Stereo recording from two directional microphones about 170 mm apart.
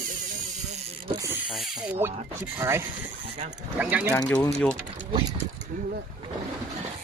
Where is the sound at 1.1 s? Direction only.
15° right (ahead or behind).